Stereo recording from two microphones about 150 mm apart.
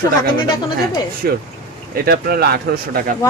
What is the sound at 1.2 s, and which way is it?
Speech, 90° right.